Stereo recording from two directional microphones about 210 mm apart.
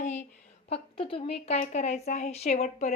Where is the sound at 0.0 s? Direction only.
35° left (ahead or behind).